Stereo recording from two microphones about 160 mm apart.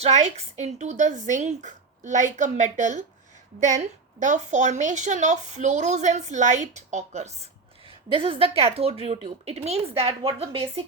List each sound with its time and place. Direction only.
0.0 s a woman's voice: 45° right (ahead or behind)
8.1 s speech: 35° right (ahead or behind)